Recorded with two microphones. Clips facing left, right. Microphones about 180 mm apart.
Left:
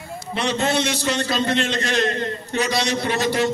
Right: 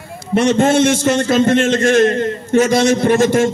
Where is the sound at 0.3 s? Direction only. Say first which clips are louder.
Right 9 dB; 50° right (ahead or behind).